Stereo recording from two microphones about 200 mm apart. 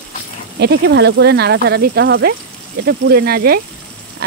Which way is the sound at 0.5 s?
55° right (ahead or behind).